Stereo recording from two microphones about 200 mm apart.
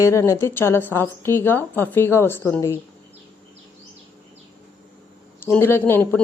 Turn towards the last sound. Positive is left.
turn(degrees=10)  # may be behind; listen again after turning